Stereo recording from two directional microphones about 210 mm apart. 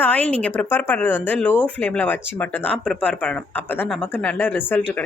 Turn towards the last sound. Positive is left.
turn(degrees=10)  # may be behind; listen again after turning